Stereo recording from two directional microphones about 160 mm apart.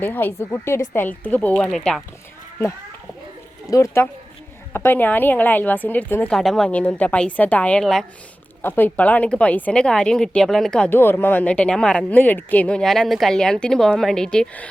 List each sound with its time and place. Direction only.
0.0 s speech: 10° left (ahead or behind)
3.7 s speech: 20° left (ahead or behind)